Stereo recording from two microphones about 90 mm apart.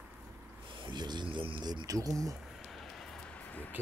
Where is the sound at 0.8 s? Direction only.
55° right (ahead or behind); by 1.6 s 70° right (ahead or behind).